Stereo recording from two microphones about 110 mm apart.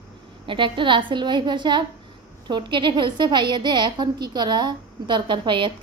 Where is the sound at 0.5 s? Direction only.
50° right (ahead or behind).